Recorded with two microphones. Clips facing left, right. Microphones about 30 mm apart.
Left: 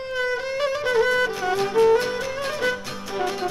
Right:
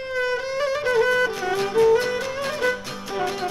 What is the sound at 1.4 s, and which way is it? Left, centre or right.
Music, right.